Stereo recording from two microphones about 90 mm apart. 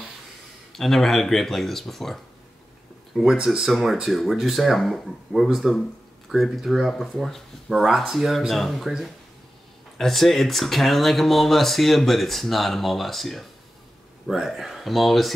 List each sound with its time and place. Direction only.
0.7 s speech: 5° left (ahead or behind)
3.2 s speech: 5° right (ahead or behind)